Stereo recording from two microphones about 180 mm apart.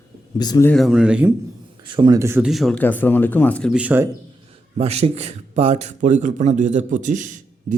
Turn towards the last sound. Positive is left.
turn(degrees=-45)  # may be behind; listen again after turning